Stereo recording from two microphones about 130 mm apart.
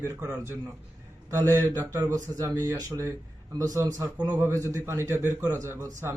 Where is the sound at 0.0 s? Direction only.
25° right (ahead or behind).